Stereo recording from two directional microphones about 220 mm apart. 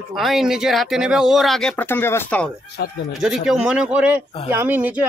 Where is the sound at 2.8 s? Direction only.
45° left (ahead or behind).